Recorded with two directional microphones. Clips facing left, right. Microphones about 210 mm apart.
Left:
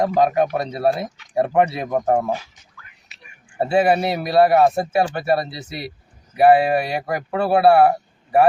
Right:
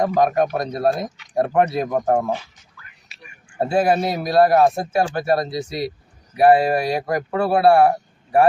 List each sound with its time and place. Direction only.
0.0 s speech: 5° left (ahead or behind)
3.6 s speech: 5° left (ahead or behind)